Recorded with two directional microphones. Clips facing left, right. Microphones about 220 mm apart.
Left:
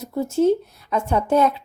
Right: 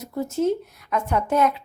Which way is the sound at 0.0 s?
30° left (ahead or behind).